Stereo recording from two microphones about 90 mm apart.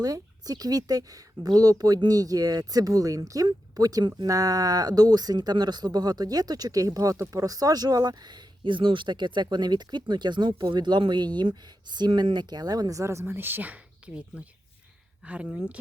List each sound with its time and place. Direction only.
0.0 s speech: 45° right (ahead or behind); by 14.2 s 15° right (ahead or behind)
15.2 s speech: 10° right (ahead or behind)